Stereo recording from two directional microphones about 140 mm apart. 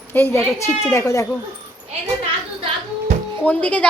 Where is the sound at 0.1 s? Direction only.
15° left (ahead or behind).